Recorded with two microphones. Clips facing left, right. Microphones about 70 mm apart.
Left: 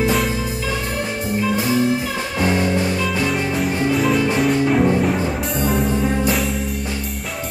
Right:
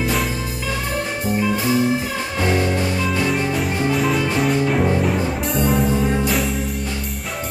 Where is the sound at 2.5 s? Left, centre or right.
Centre.